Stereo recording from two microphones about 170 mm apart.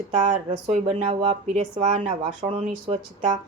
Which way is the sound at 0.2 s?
40° right (ahead or behind).